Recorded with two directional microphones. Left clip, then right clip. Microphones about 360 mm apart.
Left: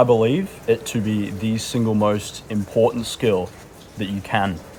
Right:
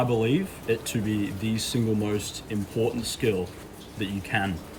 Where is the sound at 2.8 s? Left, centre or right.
Left.